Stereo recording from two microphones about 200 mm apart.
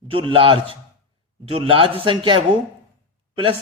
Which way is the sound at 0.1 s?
25° right (ahead or behind).